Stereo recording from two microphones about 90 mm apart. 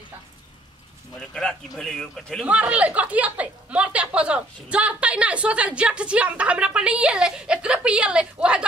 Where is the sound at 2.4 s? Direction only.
15° right (ahead or behind).